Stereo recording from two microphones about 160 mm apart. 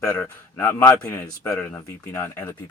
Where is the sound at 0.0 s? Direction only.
20° left (ahead or behind).